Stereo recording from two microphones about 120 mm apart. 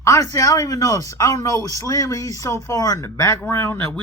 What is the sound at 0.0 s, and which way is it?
Speech, 25° left (ahead or behind).